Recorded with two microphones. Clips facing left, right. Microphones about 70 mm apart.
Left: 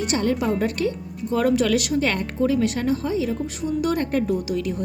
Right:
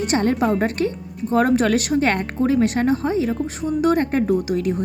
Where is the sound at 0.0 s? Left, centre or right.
Right.